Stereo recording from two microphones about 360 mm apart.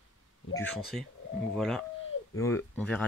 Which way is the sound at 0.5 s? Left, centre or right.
Centre.